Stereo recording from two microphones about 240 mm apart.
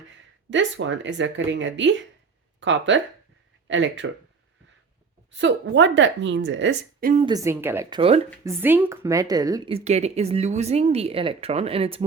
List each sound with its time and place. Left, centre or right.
0.5 s a woman's voice: right
5.3 s a woman's voice: right
7.2 s speech: centre
8.4 s a woman's voice: centre